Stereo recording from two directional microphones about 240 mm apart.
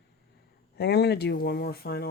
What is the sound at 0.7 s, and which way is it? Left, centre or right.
Speech, left.